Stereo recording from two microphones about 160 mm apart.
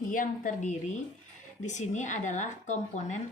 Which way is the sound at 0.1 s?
55° left (ahead or behind).